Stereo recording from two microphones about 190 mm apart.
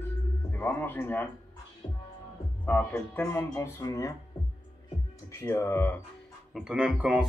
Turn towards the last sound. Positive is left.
turn(degrees=-5)  # may be behind; listen again after turning